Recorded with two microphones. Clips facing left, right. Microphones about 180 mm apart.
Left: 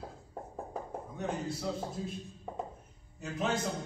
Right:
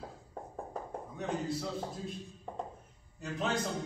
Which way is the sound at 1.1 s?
Centre (ahead or behind).